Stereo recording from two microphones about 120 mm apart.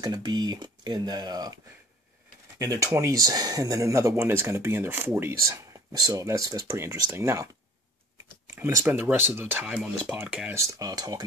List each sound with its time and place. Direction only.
0.0 s speech: 35° right (ahead or behind)
2.6 s speech: 25° right (ahead or behind)
8.5 s speech: 20° right (ahead or behind)
10.5 s speech: 25° right (ahead or behind)